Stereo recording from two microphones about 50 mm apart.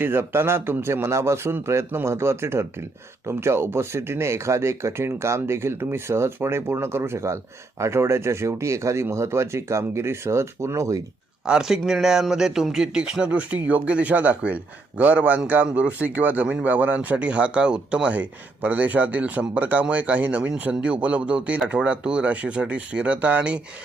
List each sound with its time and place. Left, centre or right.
0.0 s speech: right
1.0 s speech: right
11.5 s speech: centre